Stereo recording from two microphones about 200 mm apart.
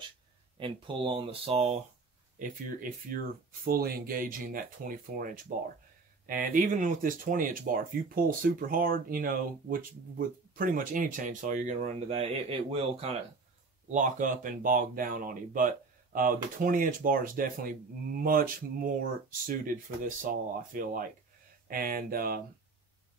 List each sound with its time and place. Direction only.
0.6 s speech: 25° right (ahead or behind)
2.3 s speech: 45° right (ahead or behind)
13.9 s speech: 40° right (ahead or behind)